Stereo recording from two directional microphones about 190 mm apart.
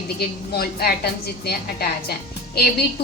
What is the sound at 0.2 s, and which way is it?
Speech, 55° left (ahead or behind).